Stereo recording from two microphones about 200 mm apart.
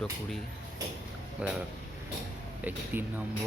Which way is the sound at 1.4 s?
5° right (ahead or behind).